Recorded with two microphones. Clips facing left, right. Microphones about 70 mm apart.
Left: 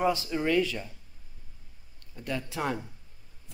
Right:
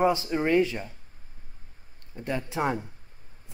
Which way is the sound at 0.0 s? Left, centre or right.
Right.